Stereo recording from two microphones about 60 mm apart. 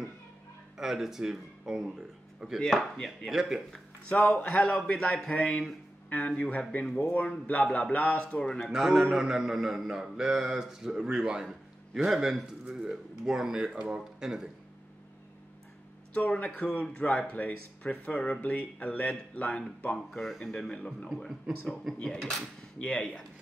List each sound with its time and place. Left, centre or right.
0.7 s speech: centre
2.6 s speech: centre
3.3 s speech: centre
4.1 s speech: centre
4.5 s speech: centre
7.0 s speech: left
8.5 s speech: centre
16.1 s speech: left
20.1 s speech: centre
20.7 s speech: centre
21.1 s speech: centre
21.9 s speech: centre